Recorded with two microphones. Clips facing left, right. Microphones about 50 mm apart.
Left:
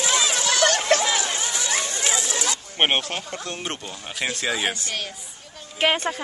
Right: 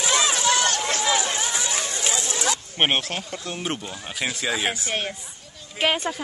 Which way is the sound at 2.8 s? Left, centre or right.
Centre.